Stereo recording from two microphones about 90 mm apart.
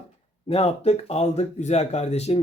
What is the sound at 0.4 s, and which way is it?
Speech, 90° left.